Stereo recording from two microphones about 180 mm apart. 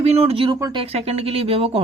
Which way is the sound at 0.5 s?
20° right (ahead or behind).